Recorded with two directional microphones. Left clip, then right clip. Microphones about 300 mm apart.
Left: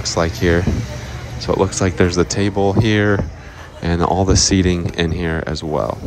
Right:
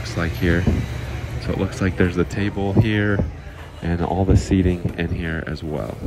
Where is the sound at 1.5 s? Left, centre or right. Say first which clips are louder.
Left 5 dB; centre.